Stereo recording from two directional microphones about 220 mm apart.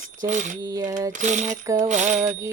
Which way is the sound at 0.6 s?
15° right (ahead or behind).